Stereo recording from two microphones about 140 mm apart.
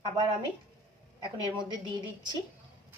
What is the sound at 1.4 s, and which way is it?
Speech, 30° right (ahead or behind).